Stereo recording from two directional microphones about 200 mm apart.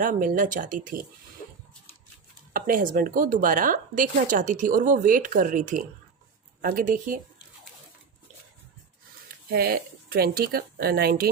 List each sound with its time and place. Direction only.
0.0 s speech: 40° right (ahead or behind)
2.5 s speech: 45° right (ahead or behind)
9.5 s speech: 50° right (ahead or behind)